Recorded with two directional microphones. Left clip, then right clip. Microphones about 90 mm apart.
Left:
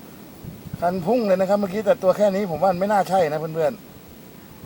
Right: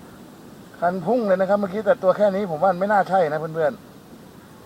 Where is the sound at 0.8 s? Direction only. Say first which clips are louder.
Even; 25° left (ahead or behind).